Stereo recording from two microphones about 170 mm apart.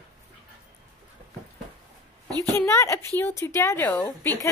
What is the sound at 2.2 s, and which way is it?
Speech, 20° right (ahead or behind).